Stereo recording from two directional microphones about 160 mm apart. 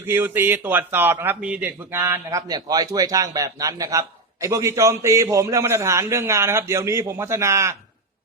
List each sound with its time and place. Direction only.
0.0 s a man's voice: 15° right (ahead or behind)